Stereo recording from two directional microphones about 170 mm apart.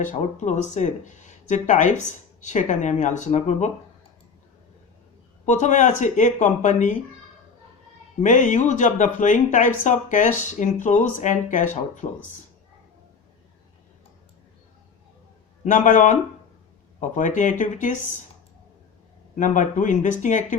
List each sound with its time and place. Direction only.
0.0 s speech: 45° left (ahead or behind)
5.5 s speech: 45° left (ahead or behind)
8.2 s speech: 45° left (ahead or behind)
15.6 s speech: 50° left (ahead or behind)
19.4 s speech: 45° left (ahead or behind)